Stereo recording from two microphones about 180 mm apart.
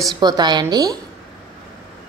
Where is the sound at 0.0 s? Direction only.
20° right (ahead or behind).